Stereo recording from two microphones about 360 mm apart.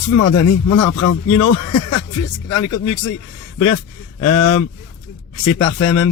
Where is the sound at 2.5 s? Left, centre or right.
Left.